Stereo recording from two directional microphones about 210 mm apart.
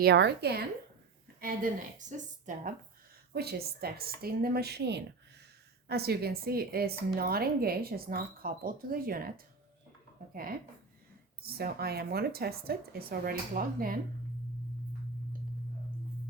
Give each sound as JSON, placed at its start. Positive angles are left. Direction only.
{"t": 0.0, "sound": "a woman's voice", "side_deg": -50}
{"t": 2.0, "sound": "a woman's voice", "side_deg": -35}
{"t": 3.3, "sound": "a woman's voice", "side_deg": -50}
{"t": 11.4, "sound": "a woman's voice", "side_deg": -45}